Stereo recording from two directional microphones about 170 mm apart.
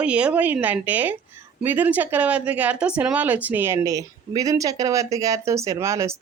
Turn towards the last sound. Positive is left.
turn(degrees=-15)  # may be behind; listen again after turning